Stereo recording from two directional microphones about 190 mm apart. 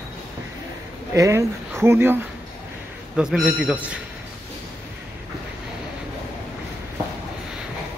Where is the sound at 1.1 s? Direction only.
15° right (ahead or behind).